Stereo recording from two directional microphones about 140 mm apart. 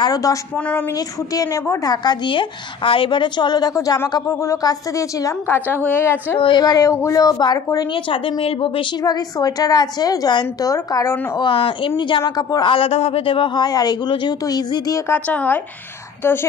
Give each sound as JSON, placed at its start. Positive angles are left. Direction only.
{"t": 0.0, "sound": "speech", "side_deg": 25}
{"t": 6.4, "sound": "speech", "side_deg": 30}
{"t": 7.9, "sound": "speech", "side_deg": 40}
{"t": 12.2, "sound": "a man's voice", "side_deg": 30}
{"t": 15.0, "sound": "speech", "side_deg": 10}